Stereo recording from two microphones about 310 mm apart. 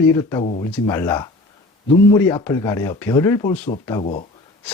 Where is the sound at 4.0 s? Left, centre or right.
Centre.